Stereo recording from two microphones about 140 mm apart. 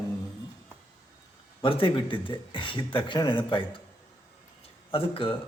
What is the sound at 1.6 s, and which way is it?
Speech, 35° left (ahead or behind).